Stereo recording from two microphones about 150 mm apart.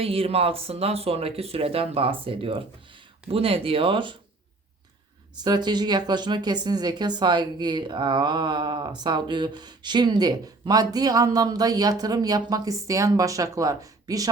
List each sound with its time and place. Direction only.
0.0 s speech: 40° right (ahead or behind)
5.4 s speech: 30° right (ahead or behind)